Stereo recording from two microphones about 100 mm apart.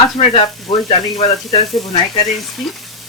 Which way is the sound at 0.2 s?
75° left (ahead or behind).